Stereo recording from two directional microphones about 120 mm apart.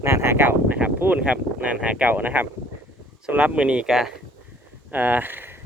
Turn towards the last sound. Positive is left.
turn(degrees=-15)  # may be behind; listen again after turning